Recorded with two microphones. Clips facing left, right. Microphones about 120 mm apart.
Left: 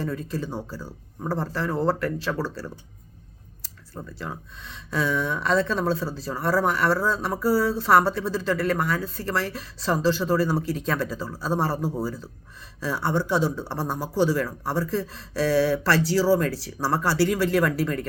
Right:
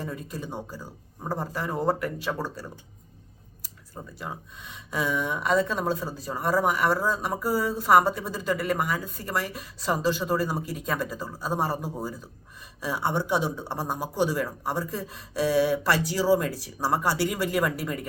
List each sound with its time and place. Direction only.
0.0 s speech: 10° right (ahead or behind)
16.5 s speech: 85° left
16.8 s speech: 15° right (ahead or behind)